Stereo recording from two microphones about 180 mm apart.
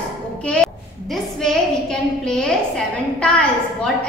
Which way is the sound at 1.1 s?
5° left (ahead or behind).